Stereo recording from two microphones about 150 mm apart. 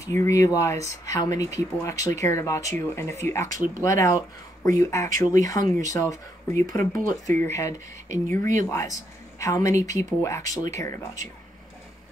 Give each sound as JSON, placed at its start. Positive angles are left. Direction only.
{"t": 0.0, "sound": "speech", "side_deg": 20}